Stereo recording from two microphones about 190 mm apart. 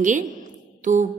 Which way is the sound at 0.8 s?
40° right (ahead or behind).